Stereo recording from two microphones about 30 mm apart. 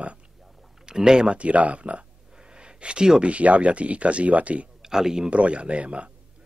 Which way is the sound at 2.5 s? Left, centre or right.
Right.